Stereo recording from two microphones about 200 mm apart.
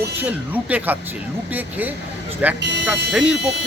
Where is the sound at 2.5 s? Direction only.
60° right (ahead or behind).